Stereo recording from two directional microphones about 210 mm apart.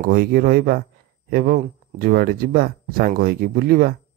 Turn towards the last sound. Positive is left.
turn(degrees=-45)  # may be behind; listen again after turning